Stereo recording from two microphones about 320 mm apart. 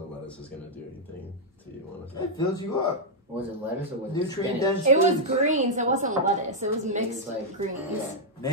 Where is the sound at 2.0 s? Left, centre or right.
Centre.